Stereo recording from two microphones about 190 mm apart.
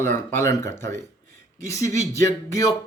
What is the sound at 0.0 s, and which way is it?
Speech, 15° left (ahead or behind).